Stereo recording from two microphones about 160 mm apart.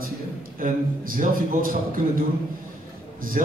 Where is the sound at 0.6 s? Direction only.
60° right (ahead or behind).